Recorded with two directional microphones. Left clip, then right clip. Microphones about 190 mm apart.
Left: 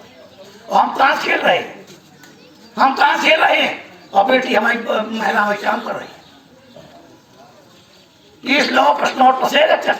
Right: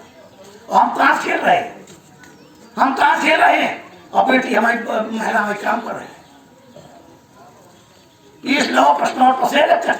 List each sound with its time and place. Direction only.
0.7 s a woman's voice: 30° right (ahead or behind)
3.1 s a man's voice: 30° right (ahead or behind)
8.5 s a woman's voice: 15° right (ahead or behind)